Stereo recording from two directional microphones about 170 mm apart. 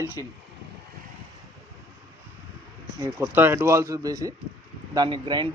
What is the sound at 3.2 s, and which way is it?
Speech, 10° right (ahead or behind).